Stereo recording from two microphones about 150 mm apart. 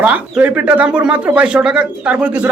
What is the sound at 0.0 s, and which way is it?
Speech, 10° right (ahead or behind).